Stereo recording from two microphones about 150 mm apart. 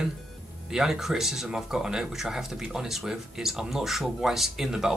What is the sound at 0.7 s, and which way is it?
Speech, 5° right (ahead or behind).